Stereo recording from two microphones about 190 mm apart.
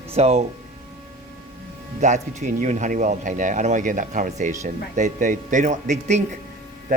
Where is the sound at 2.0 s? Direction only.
40° right (ahead or behind).